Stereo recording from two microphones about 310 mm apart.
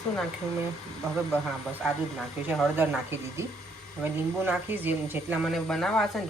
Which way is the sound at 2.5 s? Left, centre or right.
Centre.